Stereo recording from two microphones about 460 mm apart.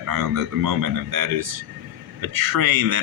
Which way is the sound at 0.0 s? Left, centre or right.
Right.